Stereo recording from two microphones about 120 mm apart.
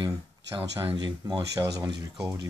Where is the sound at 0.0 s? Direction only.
30° right (ahead or behind).